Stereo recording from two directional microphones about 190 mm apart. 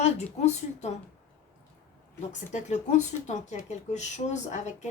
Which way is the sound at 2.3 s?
40° left (ahead or behind).